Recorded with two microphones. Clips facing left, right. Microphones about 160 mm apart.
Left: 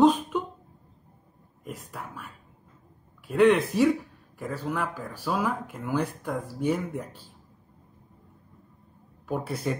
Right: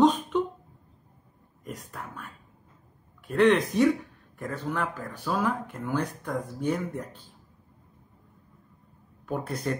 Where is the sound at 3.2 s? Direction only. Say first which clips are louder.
Left 1 dB; 5° left (ahead or behind).